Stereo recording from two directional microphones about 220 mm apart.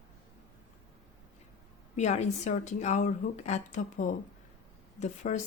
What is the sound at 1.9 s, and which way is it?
Speech, 30° left (ahead or behind).